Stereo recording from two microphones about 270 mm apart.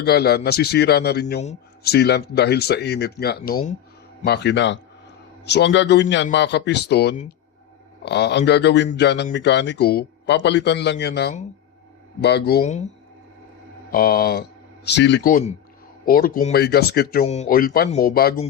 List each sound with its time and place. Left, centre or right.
0.0 s speech: left
13.9 s speech: left